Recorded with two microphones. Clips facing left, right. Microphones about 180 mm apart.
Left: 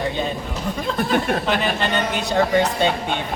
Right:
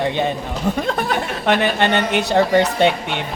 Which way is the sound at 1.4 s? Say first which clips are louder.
Right 4 dB; 70° right (ahead or behind).